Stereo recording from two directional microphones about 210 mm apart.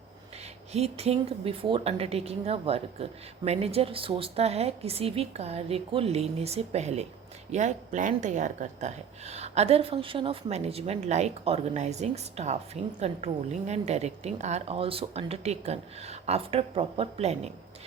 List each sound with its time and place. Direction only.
0.7 s speech: 30° right (ahead or behind)